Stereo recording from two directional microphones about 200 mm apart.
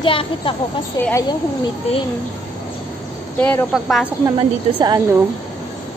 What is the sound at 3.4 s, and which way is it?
Speech, 5° left (ahead or behind).